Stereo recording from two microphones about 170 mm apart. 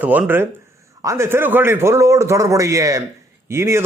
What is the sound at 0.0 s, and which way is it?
A man's voice, 10° right (ahead or behind).